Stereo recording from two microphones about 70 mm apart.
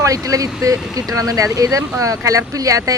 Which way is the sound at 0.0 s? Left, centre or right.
Right.